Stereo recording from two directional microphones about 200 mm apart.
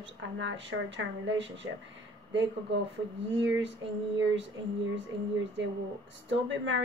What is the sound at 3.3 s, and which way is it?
Speech, 65° right (ahead or behind).